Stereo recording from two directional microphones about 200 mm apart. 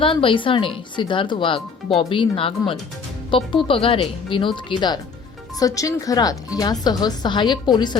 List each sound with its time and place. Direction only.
0.0 s speech: 25° left (ahead or behind)